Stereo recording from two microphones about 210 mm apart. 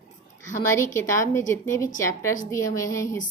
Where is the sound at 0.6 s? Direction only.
15° left (ahead or behind).